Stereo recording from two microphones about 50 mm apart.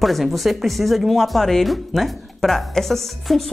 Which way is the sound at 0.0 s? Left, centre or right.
Centre.